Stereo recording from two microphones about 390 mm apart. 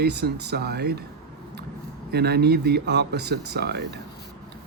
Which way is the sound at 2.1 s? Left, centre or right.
Right.